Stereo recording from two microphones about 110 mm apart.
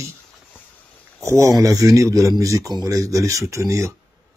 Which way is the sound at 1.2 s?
30° right (ahead or behind).